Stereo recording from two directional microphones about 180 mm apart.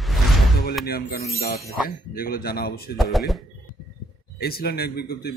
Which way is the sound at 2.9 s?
Centre (ahead or behind).